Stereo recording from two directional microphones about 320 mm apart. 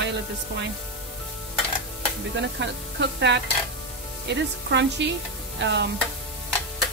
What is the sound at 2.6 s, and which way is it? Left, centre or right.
Stir, right.